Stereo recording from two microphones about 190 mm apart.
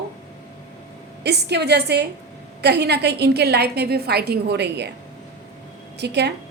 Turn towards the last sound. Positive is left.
turn(degrees=-60)  # may be behind; listen again after turning